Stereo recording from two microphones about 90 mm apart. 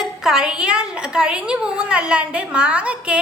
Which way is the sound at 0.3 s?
5° right (ahead or behind).